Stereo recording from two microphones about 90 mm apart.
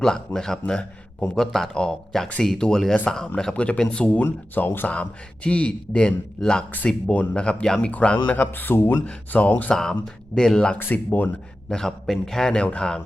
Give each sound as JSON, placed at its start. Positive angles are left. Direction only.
{"t": 0.3, "sound": "speech", "side_deg": 5}
{"t": 9.0, "sound": "speech", "side_deg": 15}
{"t": 10.8, "sound": "speech", "side_deg": 20}
{"t": 11.7, "sound": "speech", "side_deg": 5}